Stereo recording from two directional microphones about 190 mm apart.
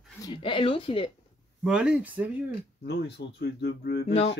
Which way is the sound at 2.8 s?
60° left (ahead or behind).